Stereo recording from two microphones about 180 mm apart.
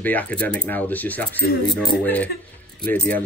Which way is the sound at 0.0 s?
10° left (ahead or behind).